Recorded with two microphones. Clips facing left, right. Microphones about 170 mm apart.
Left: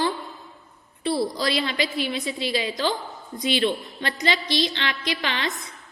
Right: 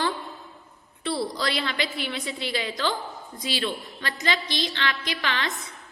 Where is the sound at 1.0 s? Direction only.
15° left (ahead or behind).